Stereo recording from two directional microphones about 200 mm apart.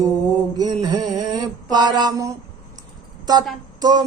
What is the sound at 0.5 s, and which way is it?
Mantra, 20° right (ahead or behind).